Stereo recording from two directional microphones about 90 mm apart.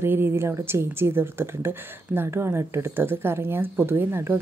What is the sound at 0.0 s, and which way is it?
A woman's voice, 25° right (ahead or behind).